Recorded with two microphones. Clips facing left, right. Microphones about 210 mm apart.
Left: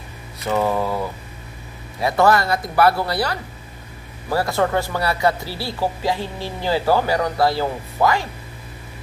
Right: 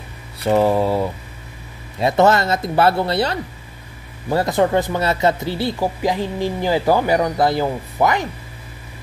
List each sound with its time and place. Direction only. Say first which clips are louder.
0.4 s speech: right 5 dB; 30° right (ahead or behind)